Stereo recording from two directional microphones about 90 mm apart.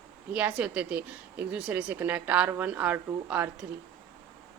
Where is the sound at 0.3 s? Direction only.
15° right (ahead or behind).